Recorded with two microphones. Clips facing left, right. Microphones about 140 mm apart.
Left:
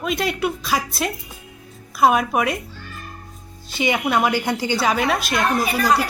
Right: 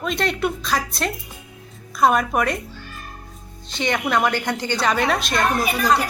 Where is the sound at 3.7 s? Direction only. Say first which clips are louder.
Left 1 dB; 5° left (ahead or behind).